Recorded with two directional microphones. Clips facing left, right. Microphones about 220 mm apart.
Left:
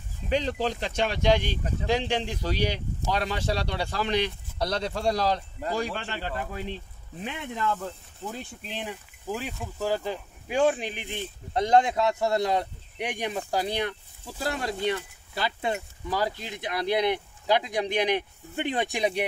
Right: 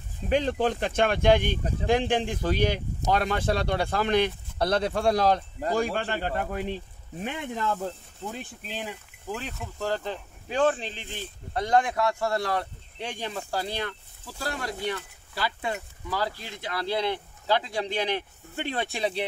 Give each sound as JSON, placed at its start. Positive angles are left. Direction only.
{"t": 0.3, "sound": "speech", "side_deg": -50}
{"t": 7.2, "sound": "speech", "side_deg": -40}
{"t": 8.3, "sound": "speech", "side_deg": 0}